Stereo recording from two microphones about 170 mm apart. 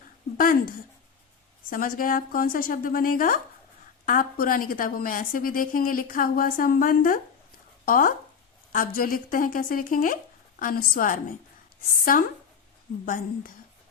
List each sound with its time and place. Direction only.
0.3 s a woman's voice: 55° left (ahead or behind)
1.7 s a woman's voice: 55° left (ahead or behind)